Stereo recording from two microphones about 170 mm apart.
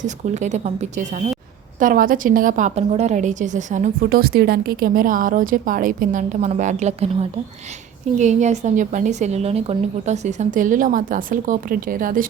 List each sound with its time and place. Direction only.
0.0 s a woman's voice: 45° right (ahead or behind)
1.8 s a woman's voice: 55° right (ahead or behind)